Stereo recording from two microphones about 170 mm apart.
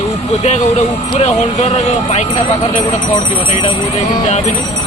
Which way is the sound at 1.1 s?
40° left (ahead or behind).